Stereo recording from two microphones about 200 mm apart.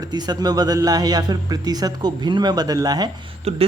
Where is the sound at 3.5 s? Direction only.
30° right (ahead or behind).